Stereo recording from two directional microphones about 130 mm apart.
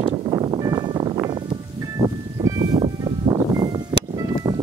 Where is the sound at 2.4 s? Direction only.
30° right (ahead or behind).